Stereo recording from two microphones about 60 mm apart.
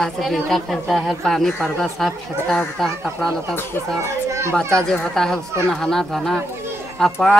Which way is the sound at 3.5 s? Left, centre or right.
Left.